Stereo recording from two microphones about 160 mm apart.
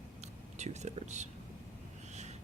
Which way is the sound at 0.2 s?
45° right (ahead or behind).